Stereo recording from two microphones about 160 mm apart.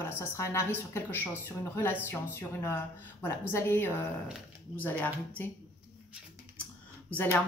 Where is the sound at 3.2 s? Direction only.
15° left (ahead or behind).